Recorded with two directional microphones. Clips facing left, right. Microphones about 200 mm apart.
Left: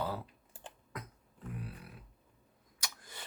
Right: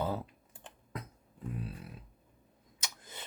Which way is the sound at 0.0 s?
25° right (ahead or behind).